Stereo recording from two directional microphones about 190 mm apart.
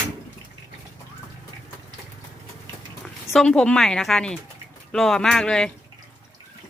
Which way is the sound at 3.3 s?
5° left (ahead or behind).